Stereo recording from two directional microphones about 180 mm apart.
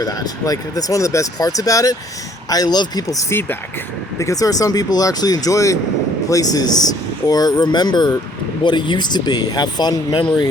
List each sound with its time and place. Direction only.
0.0 s speech: 20° left (ahead or behind)